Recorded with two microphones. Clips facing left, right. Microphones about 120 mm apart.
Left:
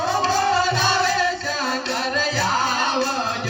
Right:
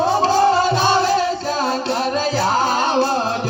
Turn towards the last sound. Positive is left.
turn(degrees=-40)  # may be behind; listen again after turning